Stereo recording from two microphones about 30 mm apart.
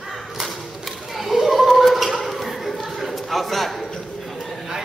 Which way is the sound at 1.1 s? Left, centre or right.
Centre.